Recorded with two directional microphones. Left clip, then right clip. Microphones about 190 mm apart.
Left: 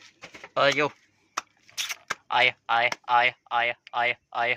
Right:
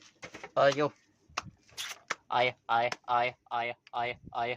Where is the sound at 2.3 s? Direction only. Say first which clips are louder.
Left 6 dB; 10° right (ahead or behind).